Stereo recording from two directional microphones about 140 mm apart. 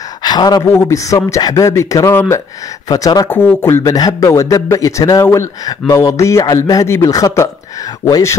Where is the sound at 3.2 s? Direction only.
15° left (ahead or behind).